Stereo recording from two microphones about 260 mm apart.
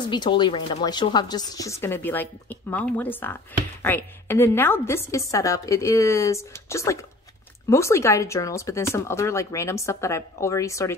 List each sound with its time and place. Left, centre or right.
0.1 s speech: centre